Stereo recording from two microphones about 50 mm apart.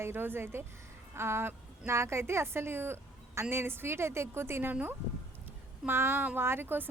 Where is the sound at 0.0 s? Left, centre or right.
Right.